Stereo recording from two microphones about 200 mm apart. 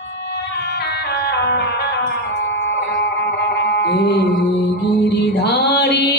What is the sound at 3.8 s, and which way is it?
Mantra, 55° left (ahead or behind).